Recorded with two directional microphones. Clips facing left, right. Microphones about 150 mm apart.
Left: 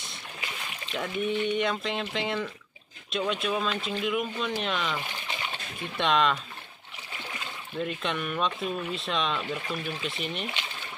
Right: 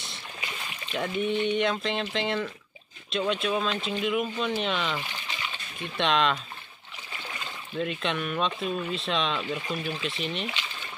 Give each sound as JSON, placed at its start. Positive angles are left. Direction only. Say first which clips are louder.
{"t": 0.9, "sound": "speech", "louder": "right 2 dB", "side_deg": 0}
{"t": 5.3, "sound": "a sound", "louder": "left 3 dB", "side_deg": 55}
{"t": 5.9, "sound": "speech", "louder": "even", "side_deg": 0}
{"t": 7.7, "sound": "speech", "louder": "right 1 dB", "side_deg": 0}